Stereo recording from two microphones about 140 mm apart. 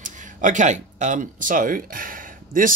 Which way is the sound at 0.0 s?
65° right (ahead or behind).